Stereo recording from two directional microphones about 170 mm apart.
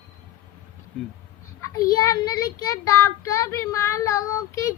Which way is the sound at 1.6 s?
20° left (ahead or behind).